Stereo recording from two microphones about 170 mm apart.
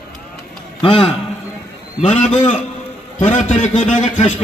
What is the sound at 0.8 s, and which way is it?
Speech, 30° left (ahead or behind).